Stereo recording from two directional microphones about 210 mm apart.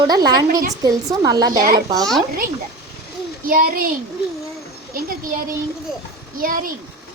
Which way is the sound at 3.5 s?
45° right (ahead or behind).